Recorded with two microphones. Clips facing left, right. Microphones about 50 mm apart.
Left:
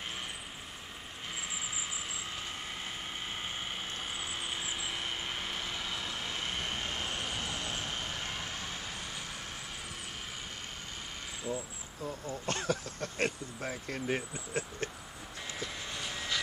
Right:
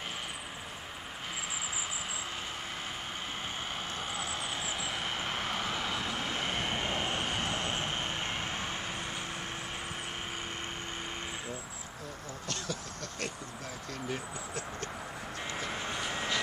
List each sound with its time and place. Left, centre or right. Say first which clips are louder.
4.8 s vehicle: right 2 dB; centre; by 8.7 s right
12.4 s speech: left 5 dB; left
15.7 s vehicle: right 5 dB; right